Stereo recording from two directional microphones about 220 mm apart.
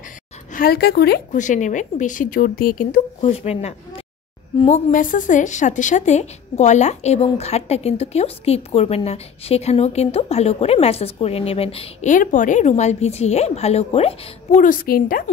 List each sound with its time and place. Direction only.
0.5 s a woman's voice: 40° left (ahead or behind)